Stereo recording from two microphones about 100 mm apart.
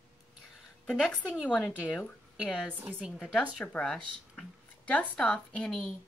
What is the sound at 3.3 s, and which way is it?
Speech, 15° left (ahead or behind).